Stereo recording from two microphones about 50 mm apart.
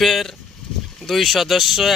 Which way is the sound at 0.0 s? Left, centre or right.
Centre.